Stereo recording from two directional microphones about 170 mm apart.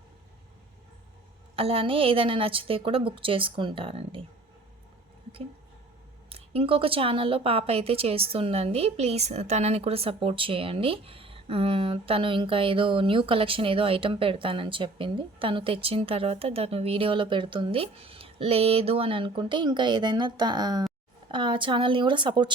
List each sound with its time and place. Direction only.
1.5 s a woman's voice: 35° right (ahead or behind)
6.3 s a woman's voice: 35° right (ahead or behind)